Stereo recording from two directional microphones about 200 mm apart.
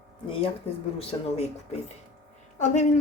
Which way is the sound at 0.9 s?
30° left (ahead or behind).